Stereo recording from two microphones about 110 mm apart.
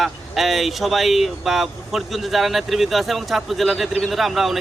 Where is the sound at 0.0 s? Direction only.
Centre (ahead or behind).